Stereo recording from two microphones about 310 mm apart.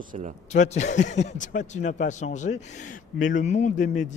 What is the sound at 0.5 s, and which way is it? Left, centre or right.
Speech, left.